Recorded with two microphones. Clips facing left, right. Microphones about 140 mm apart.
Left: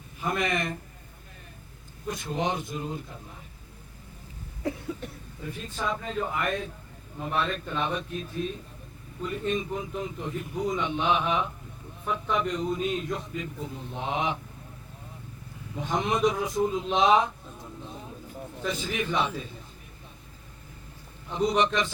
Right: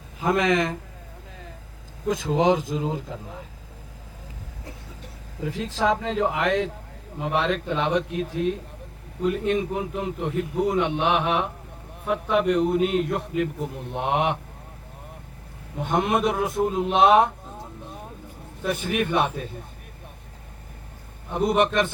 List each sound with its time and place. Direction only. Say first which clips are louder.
0.2 s a man's voice: right 7 dB; 90° right
2.0 s a man's voice: right 9 dB; 90° right
5.4 s a man's voice: right 9 dB; 90° right; by 14.3 s 65° right (ahead or behind)
15.8 s speech: right 3 dB; 60° right (ahead or behind)
18.6 s speech: right 6 dB; 60° right (ahead or behind)
21.3 s speech: right 4 dB; 55° right (ahead or behind)